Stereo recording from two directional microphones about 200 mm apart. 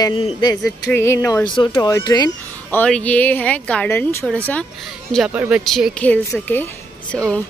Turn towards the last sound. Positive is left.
turn(degrees=5)  # may be behind; listen again after turning